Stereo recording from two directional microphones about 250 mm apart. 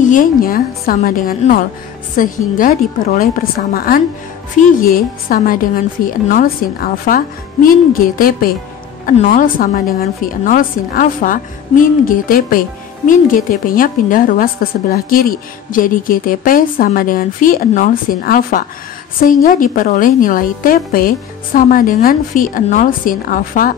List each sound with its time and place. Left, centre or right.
0.0 s a woman's voice: left